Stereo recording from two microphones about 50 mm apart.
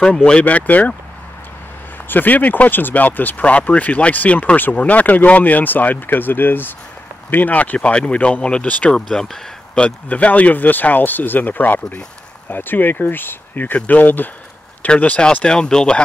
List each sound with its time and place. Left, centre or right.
0.3 s speech: left
2.0 s speech: left
8.9 s speech: centre
10.0 s speech: left
15.4 s speech: centre